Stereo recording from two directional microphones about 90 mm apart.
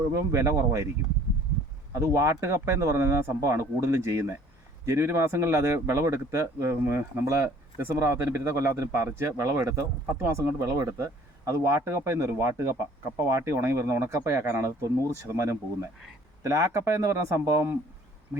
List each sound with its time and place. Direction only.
0.1 s speech: 35° right (ahead or behind)
1.9 s speech: 35° right (ahead or behind)